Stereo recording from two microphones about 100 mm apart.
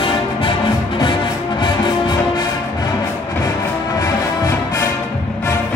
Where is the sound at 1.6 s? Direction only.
50° left (ahead or behind).